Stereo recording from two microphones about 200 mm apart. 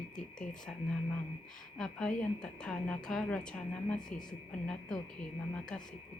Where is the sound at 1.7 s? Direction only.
5° left (ahead or behind).